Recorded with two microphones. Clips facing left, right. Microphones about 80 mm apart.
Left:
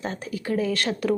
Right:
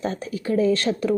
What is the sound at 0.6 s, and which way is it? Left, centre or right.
Speech, right.